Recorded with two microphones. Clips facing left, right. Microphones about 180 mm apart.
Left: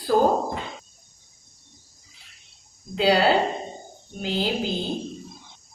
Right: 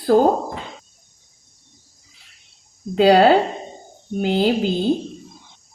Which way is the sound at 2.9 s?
55° right (ahead or behind).